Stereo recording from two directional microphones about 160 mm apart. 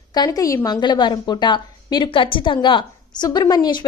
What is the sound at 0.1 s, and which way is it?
A woman's voice, 25° left (ahead or behind).